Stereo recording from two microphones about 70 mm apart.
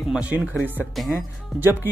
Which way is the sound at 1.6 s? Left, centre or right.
Right.